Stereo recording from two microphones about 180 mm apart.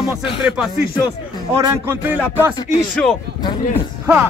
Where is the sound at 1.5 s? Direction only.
20° right (ahead or behind).